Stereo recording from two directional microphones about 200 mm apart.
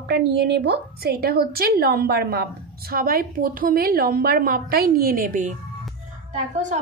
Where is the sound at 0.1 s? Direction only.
60° right (ahead or behind); by 5.5 s 40° right (ahead or behind).